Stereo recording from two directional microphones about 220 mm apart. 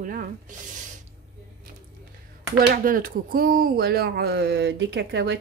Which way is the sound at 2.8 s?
40° right (ahead or behind).